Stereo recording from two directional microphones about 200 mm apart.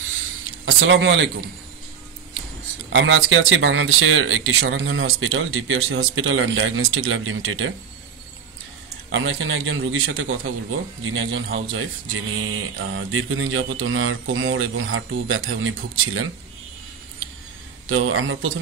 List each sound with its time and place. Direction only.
0.7 s speech: 70° right (ahead or behind)
2.9 s speech: 75° right (ahead or behind)
9.1 s speech: 75° right (ahead or behind); by 10.5 s 90° right
11.0 s a man's voice: 75° right (ahead or behind); by 16.3 s 90° right
17.8 s speech: 90° right